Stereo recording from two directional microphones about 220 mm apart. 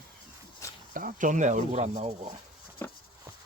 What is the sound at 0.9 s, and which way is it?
Speech, 35° right (ahead or behind).